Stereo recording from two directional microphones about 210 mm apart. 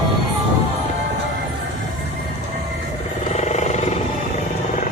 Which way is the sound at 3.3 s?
35° left (ahead or behind).